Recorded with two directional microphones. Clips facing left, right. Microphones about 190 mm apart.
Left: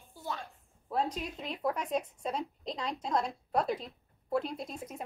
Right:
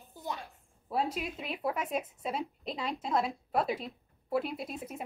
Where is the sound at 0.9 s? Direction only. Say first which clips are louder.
Right 1 dB; 5° right (ahead or behind).